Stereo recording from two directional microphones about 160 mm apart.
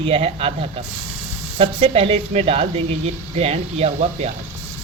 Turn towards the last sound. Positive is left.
turn(degrees=-40)  # may be behind; listen again after turning